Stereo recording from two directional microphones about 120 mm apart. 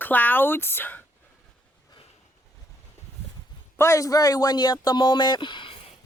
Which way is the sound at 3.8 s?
25° left (ahead or behind).